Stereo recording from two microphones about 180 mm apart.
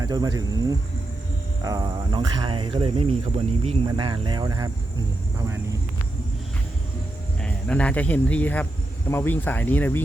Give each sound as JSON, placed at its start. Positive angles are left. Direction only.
{"t": 0.0, "sound": "speech", "side_deg": -20}
{"t": 7.4, "sound": "speech", "side_deg": 5}